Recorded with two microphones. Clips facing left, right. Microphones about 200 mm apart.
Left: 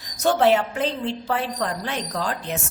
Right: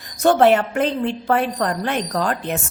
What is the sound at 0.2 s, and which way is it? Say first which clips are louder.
A woman's voice: right 4 dB; 60° right (ahead or behind).